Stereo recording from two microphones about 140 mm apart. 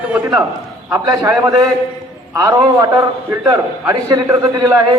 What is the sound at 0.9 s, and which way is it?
A man's voice, 20° right (ahead or behind).